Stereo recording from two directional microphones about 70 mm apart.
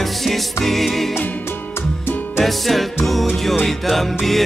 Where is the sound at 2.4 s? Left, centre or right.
Centre.